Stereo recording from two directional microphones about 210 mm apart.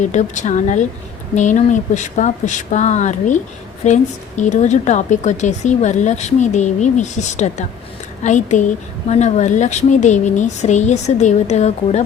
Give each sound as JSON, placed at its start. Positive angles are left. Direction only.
{"t": 0.0, "sound": "a woman's voice", "side_deg": 35}